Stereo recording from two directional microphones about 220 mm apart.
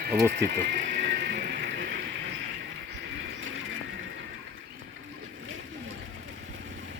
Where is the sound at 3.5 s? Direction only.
60° right (ahead or behind).